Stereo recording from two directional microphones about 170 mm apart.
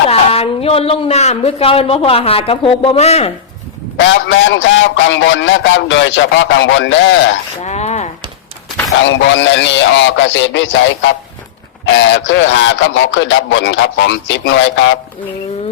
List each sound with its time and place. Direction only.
0.1 s speech: 35° left (ahead or behind)
3.9 s a man's voice: 90° left
7.6 s a sound: 40° left (ahead or behind)
9.0 s a man's voice: 90° left